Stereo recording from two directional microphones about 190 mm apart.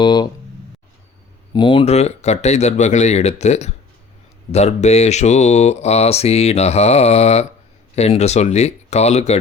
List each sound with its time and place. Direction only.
0.0 s speech: 25° left (ahead or behind)
1.5 s speech: 25° left (ahead or behind)